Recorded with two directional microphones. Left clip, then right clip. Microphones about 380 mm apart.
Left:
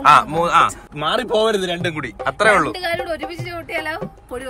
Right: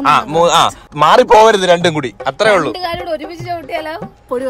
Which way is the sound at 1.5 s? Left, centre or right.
Right.